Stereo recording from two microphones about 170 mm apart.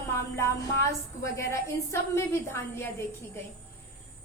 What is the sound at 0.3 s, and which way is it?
Music, 15° left (ahead or behind).